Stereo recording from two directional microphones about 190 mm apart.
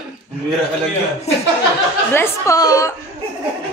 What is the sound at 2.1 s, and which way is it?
Speech, 15° left (ahead or behind).